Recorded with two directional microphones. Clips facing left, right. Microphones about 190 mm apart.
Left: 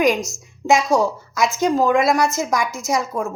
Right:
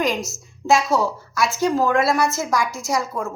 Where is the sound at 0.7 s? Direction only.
15° left (ahead or behind).